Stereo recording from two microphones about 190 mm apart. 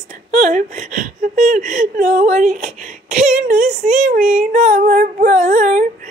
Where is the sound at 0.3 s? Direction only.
40° right (ahead or behind).